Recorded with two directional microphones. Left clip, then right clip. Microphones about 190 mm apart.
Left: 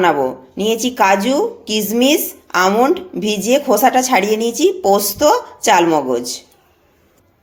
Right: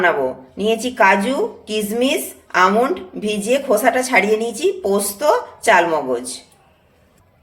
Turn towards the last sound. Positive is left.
turn(degrees=35)  # may be behind; listen again after turning